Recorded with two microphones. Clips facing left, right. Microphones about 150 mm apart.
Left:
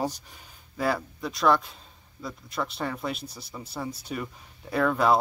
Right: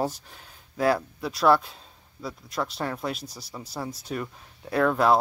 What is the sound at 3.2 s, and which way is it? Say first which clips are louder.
Speech: even; 55° left (ahead or behind).